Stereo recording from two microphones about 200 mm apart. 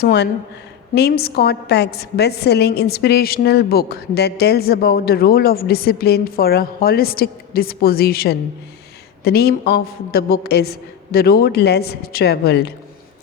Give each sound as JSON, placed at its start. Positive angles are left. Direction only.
{"t": 0.0, "sound": "a woman's voice", "side_deg": 55}